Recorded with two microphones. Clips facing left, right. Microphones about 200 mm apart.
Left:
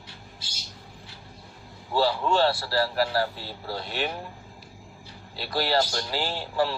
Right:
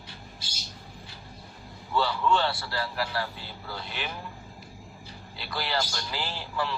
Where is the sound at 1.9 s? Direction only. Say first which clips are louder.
Left 3 dB; 35° left (ahead or behind).